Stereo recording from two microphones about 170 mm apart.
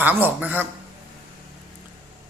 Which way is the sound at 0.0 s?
10° right (ahead or behind).